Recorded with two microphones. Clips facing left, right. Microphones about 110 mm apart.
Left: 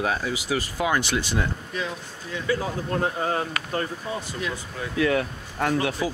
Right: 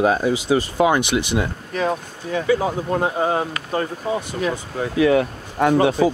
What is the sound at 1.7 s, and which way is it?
Speech, 55° right (ahead or behind).